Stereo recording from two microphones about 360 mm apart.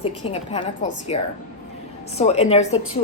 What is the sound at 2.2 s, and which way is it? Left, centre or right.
Speech, centre.